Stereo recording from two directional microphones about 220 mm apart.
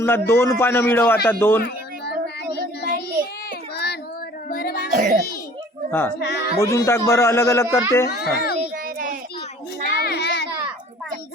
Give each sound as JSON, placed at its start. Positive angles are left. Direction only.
{"t": 0.0, "sound": "a man's voice", "side_deg": 10}
{"t": 1.6, "sound": "child singing", "side_deg": 50}
{"t": 4.4, "sound": "music", "side_deg": 40}
{"t": 4.9, "sound": "a child's voice", "side_deg": -35}
{"t": 5.9, "sound": "a man's voice", "side_deg": 10}
{"t": 6.1, "sound": "speech", "side_deg": 50}
{"t": 6.6, "sound": "a man's voice", "side_deg": 15}
{"t": 8.1, "sound": "a child's voice", "side_deg": 45}
{"t": 8.7, "sound": "child singing", "side_deg": -40}
{"t": 10.0, "sound": "child singing", "side_deg": 50}